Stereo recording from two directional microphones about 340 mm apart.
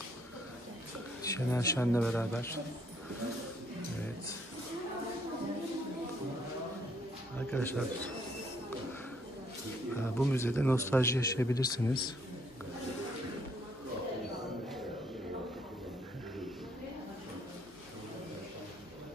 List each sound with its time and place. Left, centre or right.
1.2 s a man's voice: centre
7.3 s speech: centre
9.9 s a man's voice: centre